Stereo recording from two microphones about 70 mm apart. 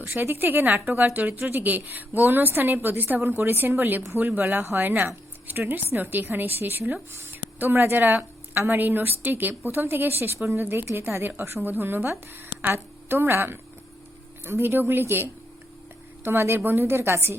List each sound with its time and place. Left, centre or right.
0.0 s a woman's voice: right